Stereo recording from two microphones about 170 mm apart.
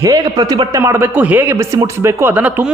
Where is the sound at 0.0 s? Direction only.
20° right (ahead or behind).